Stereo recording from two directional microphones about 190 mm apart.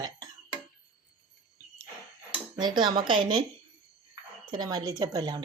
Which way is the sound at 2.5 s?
25° right (ahead or behind).